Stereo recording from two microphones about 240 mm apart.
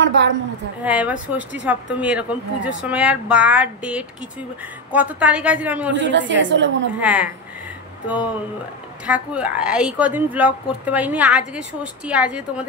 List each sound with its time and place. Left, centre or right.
0.0 s a sound: right
0.8 s speech: centre
5.9 s a woman's voice: right
7.0 s speech: centre
9.0 s speech: centre